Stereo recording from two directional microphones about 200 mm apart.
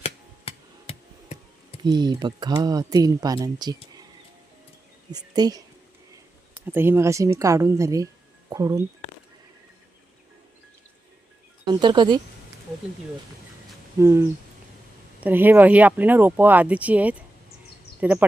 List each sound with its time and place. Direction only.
0.0 s a sound: 30° left (ahead or behind)
1.8 s speech: 20° right (ahead or behind)
5.1 s speech: 20° right (ahead or behind)
6.7 s speech: 10° right (ahead or behind)
11.6 s speech: 20° right (ahead or behind)
14.0 s speech: 15° right (ahead or behind)